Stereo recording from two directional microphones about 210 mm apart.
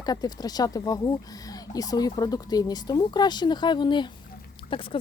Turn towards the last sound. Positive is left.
turn(degrees=25)  # may be behind; listen again after turning